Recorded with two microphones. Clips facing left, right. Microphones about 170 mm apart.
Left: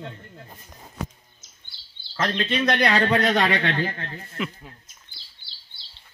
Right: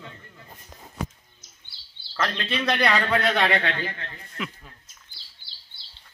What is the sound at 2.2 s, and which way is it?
A man's voice, 35° left (ahead or behind).